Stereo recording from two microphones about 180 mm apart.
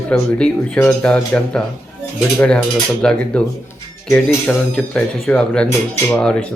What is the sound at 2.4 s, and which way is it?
Dishes, 5° left (ahead or behind).